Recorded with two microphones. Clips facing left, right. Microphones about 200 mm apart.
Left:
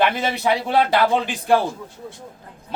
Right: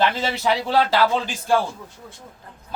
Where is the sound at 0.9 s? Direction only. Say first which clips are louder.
Left 2 dB; 55° left (ahead or behind).